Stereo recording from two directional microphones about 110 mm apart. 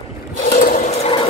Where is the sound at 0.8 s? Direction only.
70° left (ahead or behind).